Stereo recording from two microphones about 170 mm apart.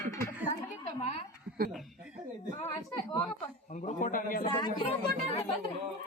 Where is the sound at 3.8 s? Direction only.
45° left (ahead or behind).